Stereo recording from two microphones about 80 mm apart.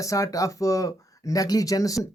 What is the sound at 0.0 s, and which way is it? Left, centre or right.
Speech, left.